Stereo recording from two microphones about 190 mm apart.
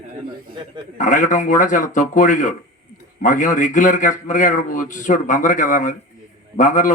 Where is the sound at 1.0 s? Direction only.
40° left (ahead or behind).